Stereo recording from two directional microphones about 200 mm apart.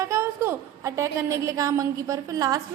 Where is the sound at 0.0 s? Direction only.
15° right (ahead or behind).